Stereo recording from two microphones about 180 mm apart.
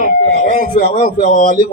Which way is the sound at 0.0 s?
40° left (ahead or behind).